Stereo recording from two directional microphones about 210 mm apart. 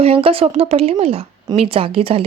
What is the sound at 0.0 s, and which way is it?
A woman's voice, 25° right (ahead or behind).